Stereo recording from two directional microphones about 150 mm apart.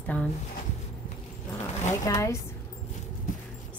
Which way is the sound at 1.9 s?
20° left (ahead or behind).